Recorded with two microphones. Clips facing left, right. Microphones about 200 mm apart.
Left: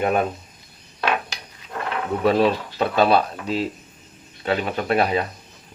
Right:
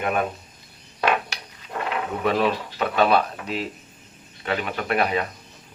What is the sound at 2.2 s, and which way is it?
Speech, 30° left (ahead or behind).